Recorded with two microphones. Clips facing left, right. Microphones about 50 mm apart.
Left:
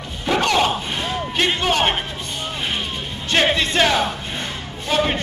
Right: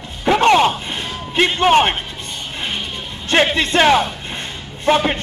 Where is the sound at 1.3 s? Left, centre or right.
Right.